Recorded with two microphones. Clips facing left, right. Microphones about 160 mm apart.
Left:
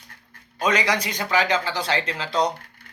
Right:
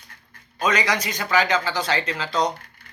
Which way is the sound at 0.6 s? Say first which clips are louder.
Even; 30° left (ahead or behind).